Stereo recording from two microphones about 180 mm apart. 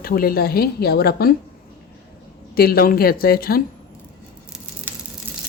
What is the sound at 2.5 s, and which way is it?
Speech, 55° left (ahead or behind).